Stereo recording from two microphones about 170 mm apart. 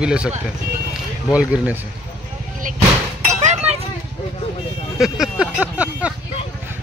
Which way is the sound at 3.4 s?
40° right (ahead or behind).